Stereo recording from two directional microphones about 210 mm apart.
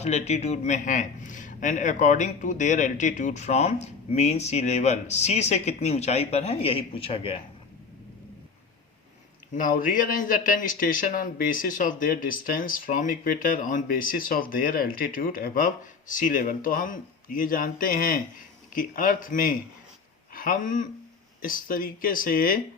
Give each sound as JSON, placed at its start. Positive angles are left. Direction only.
{"t": 0.0, "sound": "a man's voice", "side_deg": 30}
{"t": 9.6, "sound": "a man's voice", "side_deg": 40}